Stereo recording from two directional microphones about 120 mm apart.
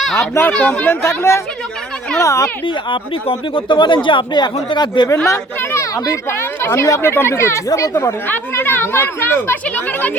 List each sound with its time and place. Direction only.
0.2 s speech: 20° left (ahead or behind)
2.6 s speech: 45° left (ahead or behind)
5.3 s speech: 25° left (ahead or behind)